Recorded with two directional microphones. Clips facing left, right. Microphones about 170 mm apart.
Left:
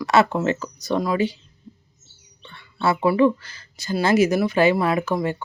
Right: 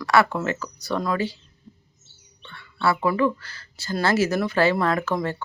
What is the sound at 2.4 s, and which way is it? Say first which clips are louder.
Speech: left 1 dB; 20° left (ahead or behind).